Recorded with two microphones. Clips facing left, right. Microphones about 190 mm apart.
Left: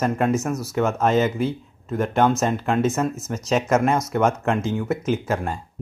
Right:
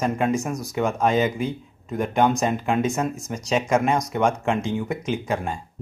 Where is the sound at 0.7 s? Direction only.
10° right (ahead or behind).